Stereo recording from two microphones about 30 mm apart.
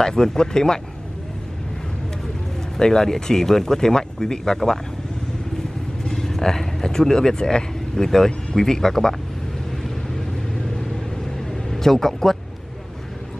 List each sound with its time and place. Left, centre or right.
0.0 s speech: left
2.8 s speech: centre
6.0 s speech: centre
11.3 s vehicle: centre